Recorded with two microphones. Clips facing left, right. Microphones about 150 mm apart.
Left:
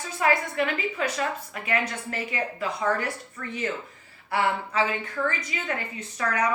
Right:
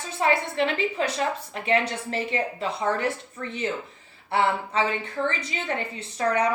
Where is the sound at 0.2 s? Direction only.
30° right (ahead or behind).